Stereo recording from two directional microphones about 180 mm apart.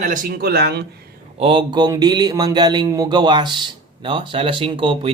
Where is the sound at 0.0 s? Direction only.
50° right (ahead or behind); by 0.9 s 65° right (ahead or behind).